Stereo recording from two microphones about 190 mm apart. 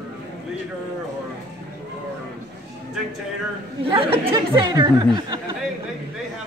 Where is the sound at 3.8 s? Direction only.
30° right (ahead or behind).